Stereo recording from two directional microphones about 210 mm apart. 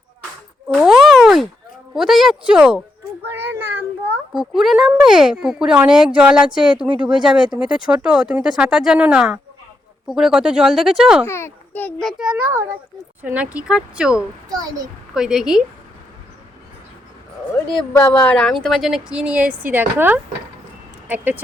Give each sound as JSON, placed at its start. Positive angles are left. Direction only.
{"t": 0.7, "sound": "a sound", "side_deg": 0}
{"t": 2.0, "sound": "speech", "side_deg": 0}
{"t": 3.5, "sound": "child singing", "side_deg": -10}
{"t": 4.4, "sound": "speech", "side_deg": 0}
{"t": 11.3, "sound": "speech", "side_deg": 10}
{"t": 14.5, "sound": "speech", "side_deg": -15}
{"t": 15.1, "sound": "speech", "side_deg": -5}
{"t": 17.7, "sound": "speech", "side_deg": 5}